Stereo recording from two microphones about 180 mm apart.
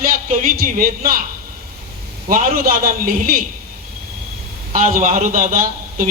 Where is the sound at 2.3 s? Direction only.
55° right (ahead or behind).